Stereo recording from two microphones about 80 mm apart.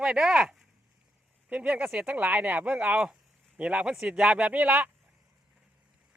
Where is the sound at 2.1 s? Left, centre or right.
Right.